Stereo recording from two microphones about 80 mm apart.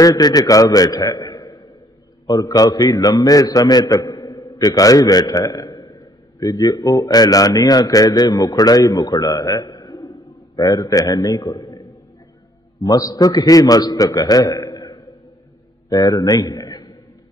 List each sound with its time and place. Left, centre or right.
0.0 s a man's voice: left
9.6 s a sound: left
12.8 s a man's voice: left